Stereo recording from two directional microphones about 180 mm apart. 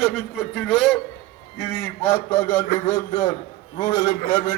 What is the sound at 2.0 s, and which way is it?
Speech, 10° left (ahead or behind).